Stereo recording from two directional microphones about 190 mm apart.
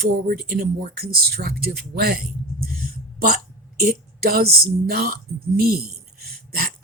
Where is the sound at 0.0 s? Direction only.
50° right (ahead or behind).